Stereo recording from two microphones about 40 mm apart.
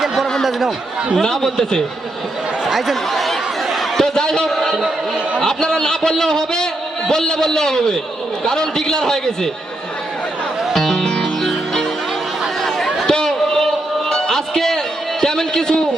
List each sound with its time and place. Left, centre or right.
1.2 s a man's voice: centre
2.6 s chatter: centre
2.9 s a sound: centre
4.0 s a man's voice: centre
4.6 s a man's voice: centre
5.4 s a man's voice: centre
10.8 s music: centre
15.2 s a man's voice: centre